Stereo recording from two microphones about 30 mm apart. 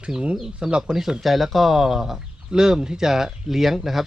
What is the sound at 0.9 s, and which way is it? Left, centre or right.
Speech, centre.